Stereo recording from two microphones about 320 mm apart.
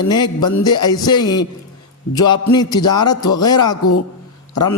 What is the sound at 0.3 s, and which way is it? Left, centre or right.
Speech, left.